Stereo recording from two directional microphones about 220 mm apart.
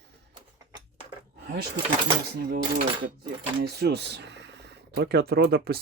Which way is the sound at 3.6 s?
45° right (ahead or behind).